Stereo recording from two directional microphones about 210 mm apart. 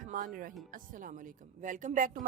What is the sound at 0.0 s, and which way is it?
Music, 40° right (ahead or behind).